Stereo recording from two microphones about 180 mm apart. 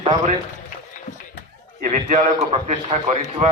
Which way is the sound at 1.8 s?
45° right (ahead or behind).